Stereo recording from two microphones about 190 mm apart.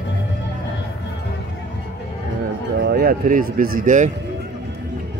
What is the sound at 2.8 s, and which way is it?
Speech, 55° right (ahead or behind).